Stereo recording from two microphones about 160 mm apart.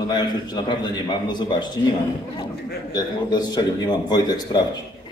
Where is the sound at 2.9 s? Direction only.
25° left (ahead or behind).